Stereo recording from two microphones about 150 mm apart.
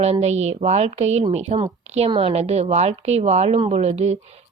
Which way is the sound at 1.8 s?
50° right (ahead or behind).